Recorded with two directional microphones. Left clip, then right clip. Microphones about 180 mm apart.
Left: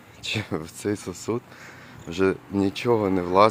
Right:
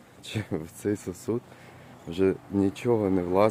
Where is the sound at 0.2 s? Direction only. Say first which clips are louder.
Left 5 dB; 10° right (ahead or behind).